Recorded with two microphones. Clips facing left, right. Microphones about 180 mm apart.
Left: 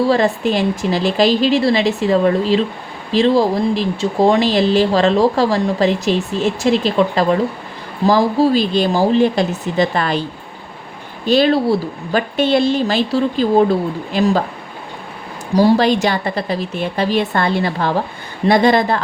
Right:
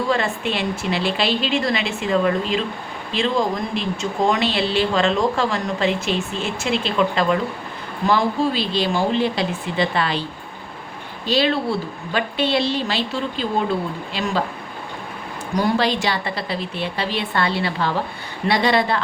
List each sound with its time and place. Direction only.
0.0 s speech: 35° left (ahead or behind)
11.3 s speech: 45° left (ahead or behind)
15.8 s speech: 45° left (ahead or behind)